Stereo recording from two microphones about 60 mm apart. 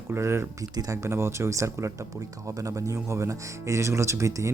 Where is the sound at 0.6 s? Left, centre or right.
Right.